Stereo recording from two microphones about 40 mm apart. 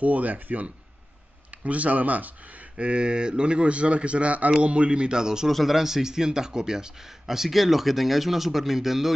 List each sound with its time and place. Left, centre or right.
0.0 s speech: right
2.8 s a man's voice: right
5.5 s speech: centre
5.8 s speech: centre